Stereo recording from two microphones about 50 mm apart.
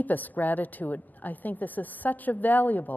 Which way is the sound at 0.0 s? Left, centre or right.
Left.